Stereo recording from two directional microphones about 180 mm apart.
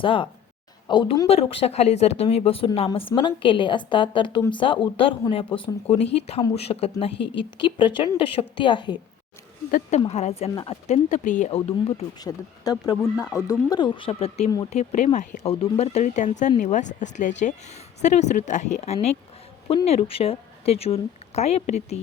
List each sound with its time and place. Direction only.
0.0 s speech: 30° left (ahead or behind)
1.3 s speech: 35° left (ahead or behind)
10.1 s speech: 35° left (ahead or behind)
12.7 s speech: 20° left (ahead or behind); by 21.9 s 35° left (ahead or behind)